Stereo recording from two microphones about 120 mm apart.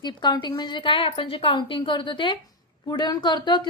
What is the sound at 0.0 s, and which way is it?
A woman's voice, 35° left (ahead or behind).